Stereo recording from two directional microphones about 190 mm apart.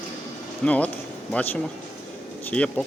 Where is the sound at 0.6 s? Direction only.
5° left (ahead or behind).